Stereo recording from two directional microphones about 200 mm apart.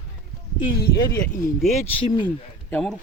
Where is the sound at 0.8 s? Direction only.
50° left (ahead or behind).